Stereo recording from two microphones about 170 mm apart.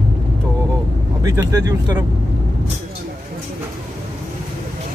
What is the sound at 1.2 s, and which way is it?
Speech, 20° right (ahead or behind).